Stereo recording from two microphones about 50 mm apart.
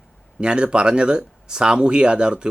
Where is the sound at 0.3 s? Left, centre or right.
Centre.